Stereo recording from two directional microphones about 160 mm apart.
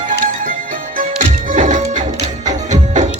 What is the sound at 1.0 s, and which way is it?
Music, 55° right (ahead or behind).